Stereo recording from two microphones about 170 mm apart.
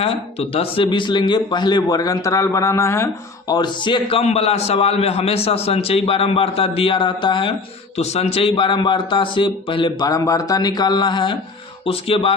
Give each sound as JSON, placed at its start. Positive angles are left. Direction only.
{"t": 0.0, "sound": "a man's voice", "side_deg": 35}
{"t": 3.5, "sound": "a man's voice", "side_deg": 25}